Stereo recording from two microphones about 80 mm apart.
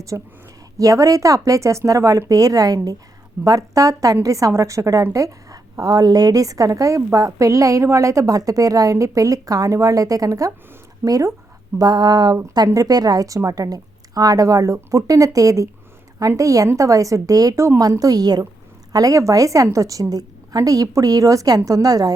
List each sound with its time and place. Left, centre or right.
0.1 s a woman's voice: right
11.8 s a sound: right
12.6 s a woman's voice: right